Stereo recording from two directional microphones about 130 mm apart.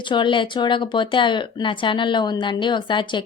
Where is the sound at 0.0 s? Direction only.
40° left (ahead or behind).